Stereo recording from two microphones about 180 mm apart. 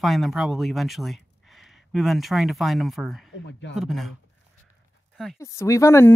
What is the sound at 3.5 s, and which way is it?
Speech, 80° left.